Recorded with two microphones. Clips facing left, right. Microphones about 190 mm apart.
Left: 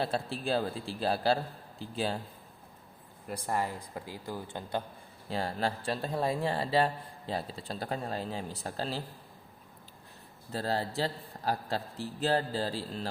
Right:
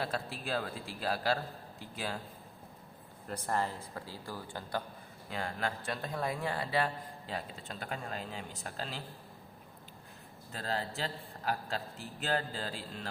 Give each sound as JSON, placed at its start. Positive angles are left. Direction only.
{"t": 0.0, "sound": "a man's voice", "side_deg": 30}
{"t": 3.2, "sound": "speech", "side_deg": 10}
{"t": 5.3, "sound": "speech", "side_deg": 35}
{"t": 10.5, "sound": "speech", "side_deg": 35}